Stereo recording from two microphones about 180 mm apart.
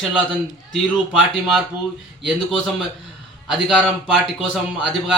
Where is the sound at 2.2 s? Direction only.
Centre (ahead or behind).